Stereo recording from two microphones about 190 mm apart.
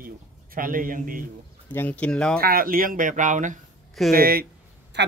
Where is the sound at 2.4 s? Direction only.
50° right (ahead or behind).